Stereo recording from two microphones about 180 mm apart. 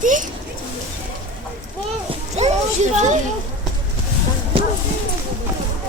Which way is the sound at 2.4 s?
35° right (ahead or behind).